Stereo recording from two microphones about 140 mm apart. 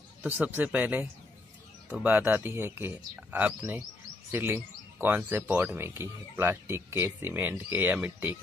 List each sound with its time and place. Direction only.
0.2 s speech: 10° right (ahead or behind)